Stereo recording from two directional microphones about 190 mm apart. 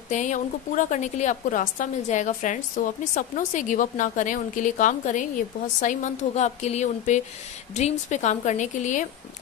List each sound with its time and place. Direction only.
0.1 s a woman's voice: 40° left (ahead or behind)